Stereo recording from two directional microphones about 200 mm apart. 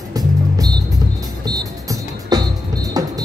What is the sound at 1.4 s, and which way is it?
Music, 20° right (ahead or behind).